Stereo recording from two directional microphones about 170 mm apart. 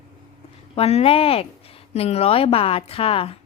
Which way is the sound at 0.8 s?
35° left (ahead or behind).